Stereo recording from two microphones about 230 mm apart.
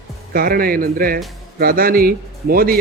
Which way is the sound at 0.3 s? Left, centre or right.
Right.